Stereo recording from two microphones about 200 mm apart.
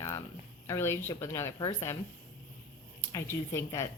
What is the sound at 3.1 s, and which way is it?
Speech, 15° left (ahead or behind).